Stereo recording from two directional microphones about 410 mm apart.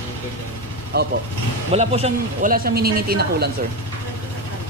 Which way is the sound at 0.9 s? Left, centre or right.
Right.